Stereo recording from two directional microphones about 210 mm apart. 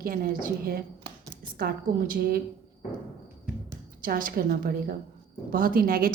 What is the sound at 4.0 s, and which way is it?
A woman's voice, 40° right (ahead or behind).